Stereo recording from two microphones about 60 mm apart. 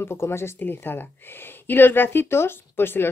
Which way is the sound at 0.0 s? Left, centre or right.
Left.